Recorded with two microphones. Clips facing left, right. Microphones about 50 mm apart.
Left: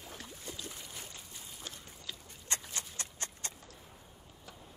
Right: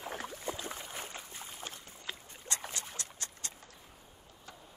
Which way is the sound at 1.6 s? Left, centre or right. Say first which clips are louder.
Right 2 dB; right.